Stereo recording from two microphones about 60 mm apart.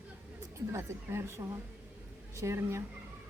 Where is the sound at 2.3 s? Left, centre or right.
Right.